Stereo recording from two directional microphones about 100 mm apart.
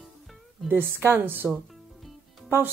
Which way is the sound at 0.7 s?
25° right (ahead or behind).